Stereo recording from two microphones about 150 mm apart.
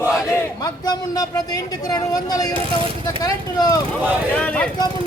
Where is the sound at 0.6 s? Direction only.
25° left (ahead or behind).